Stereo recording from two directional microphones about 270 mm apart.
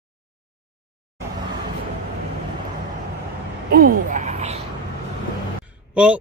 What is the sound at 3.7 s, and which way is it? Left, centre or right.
Speech, right.